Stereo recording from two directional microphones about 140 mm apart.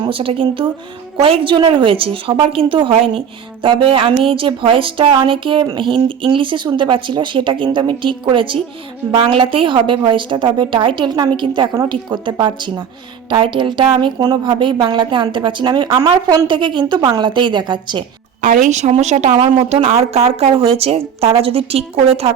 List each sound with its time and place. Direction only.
0.0 s a woman's voice: 40° right (ahead or behind)
18.4 s a woman's voice: 65° right (ahead or behind); by 22.3 s 45° right (ahead or behind)